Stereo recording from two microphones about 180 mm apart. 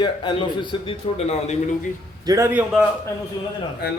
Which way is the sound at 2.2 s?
20° right (ahead or behind).